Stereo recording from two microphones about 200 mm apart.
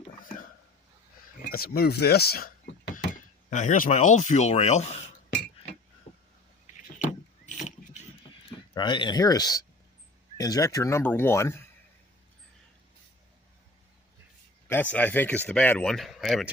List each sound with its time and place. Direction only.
1.5 s speech: 50° left (ahead or behind)
3.5 s speech: 40° left (ahead or behind)
7.4 s pulleys: 35° left (ahead or behind)
8.7 s speech: 25° left (ahead or behind)
14.7 s speech: 10° left (ahead or behind)